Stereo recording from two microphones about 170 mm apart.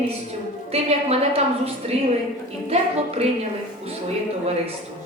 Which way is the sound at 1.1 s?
40° right (ahead or behind).